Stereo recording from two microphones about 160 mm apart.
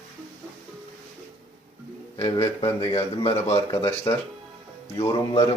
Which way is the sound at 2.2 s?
40° left (ahead or behind).